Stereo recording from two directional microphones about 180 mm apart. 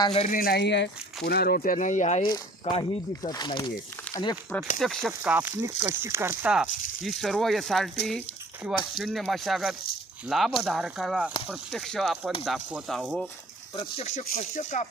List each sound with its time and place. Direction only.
0.0 s speech: 30° left (ahead or behind)
0.3 s speech: 55° left (ahead or behind)
2.2 s speech: 30° left (ahead or behind)
4.8 s speech: centre (ahead or behind)
9.0 s speech: centre (ahead or behind)
13.7 s speech: 35° left (ahead or behind)